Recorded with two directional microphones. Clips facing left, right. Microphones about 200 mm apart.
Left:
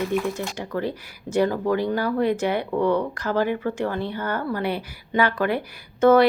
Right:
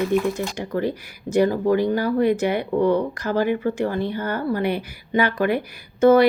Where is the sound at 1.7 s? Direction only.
15° right (ahead or behind).